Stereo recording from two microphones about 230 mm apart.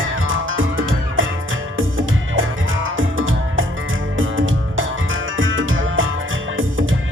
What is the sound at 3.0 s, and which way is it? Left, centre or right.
Music, right.